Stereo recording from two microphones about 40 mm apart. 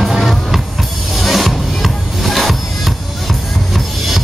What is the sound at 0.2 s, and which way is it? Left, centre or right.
Music, centre.